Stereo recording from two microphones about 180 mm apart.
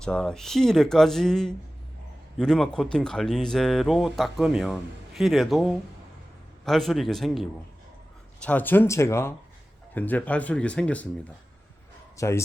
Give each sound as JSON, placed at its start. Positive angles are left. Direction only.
{"t": 0.0, "sound": "speech", "side_deg": 5}
{"t": 12.1, "sound": "speech", "side_deg": 15}